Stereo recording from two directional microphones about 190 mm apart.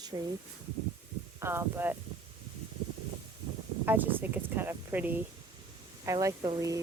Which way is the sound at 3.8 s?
10° right (ahead or behind).